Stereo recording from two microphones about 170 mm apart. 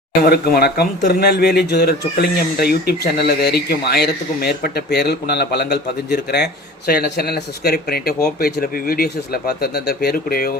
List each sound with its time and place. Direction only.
0.2 s speech: 65° left (ahead or behind)